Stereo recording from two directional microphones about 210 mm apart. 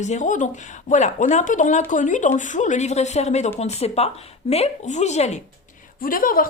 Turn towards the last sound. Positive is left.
turn(degrees=40)  # may be behind; listen again after turning